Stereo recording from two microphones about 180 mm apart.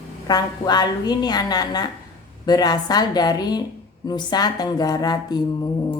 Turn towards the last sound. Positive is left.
turn(degrees=25)  # may be behind; listen again after turning